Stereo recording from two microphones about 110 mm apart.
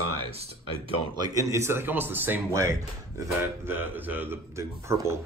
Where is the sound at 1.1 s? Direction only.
30° right (ahead or behind).